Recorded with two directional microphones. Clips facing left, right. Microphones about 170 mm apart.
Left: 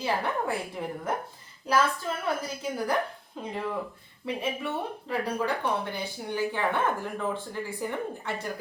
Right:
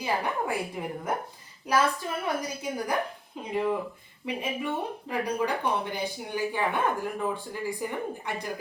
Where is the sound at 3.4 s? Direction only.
15° right (ahead or behind).